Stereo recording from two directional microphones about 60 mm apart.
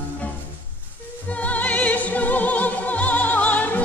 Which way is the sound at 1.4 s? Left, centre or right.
Left.